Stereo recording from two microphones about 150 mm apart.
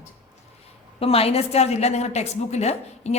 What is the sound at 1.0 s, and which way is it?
Speech, 40° left (ahead or behind).